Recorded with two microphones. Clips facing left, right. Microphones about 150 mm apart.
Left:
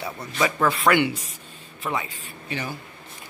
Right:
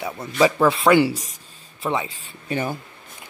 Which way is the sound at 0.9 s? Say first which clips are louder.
Right 5 dB; 35° right (ahead or behind).